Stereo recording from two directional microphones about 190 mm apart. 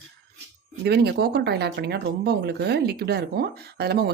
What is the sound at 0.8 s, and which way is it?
Speech, 60° right (ahead or behind).